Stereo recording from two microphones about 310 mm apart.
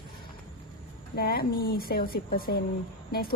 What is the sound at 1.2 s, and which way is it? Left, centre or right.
A woman's voice, left.